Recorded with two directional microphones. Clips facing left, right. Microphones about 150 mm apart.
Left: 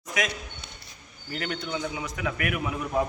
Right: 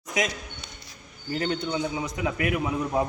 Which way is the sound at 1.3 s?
25° right (ahead or behind).